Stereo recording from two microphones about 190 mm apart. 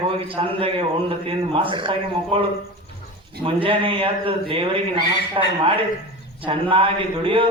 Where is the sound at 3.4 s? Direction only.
30° right (ahead or behind).